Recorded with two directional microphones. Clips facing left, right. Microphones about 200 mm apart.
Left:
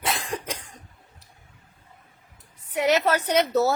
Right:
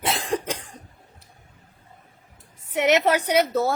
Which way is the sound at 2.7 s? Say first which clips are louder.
Right 2 dB; 20° right (ahead or behind).